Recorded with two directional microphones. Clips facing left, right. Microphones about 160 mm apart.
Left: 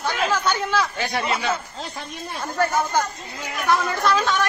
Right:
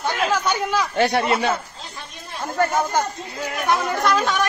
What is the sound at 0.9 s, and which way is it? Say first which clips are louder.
Speech: right 6 dB; 60° right (ahead or behind).